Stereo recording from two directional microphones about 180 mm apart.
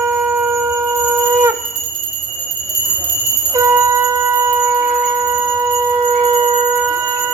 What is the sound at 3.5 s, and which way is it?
Bell, 15° right (ahead or behind).